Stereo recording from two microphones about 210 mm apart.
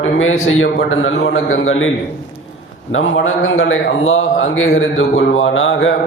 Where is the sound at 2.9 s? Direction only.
70° left (ahead or behind).